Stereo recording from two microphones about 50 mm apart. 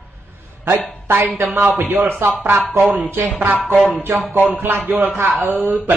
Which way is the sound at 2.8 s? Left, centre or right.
Centre.